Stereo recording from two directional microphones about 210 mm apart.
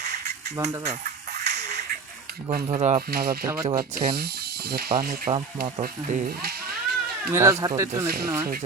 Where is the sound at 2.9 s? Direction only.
45° right (ahead or behind).